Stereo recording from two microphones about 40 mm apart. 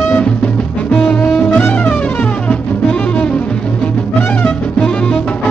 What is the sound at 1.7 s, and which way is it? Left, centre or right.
Music, left.